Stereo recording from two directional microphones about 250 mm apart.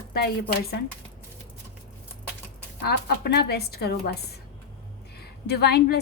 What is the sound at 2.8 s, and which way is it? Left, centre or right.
A woman's voice, left.